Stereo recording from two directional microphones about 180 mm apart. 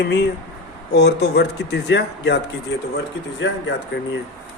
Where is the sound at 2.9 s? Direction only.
85° left.